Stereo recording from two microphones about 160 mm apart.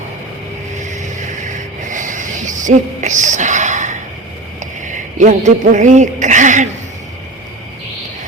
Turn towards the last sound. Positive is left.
turn(degrees=-50)  # may be behind; listen again after turning